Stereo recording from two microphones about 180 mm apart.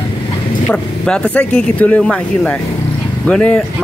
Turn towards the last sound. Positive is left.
turn(degrees=5)  # may be behind; listen again after turning